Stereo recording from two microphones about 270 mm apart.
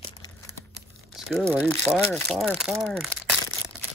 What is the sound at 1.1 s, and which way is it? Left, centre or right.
Crumpling, centre.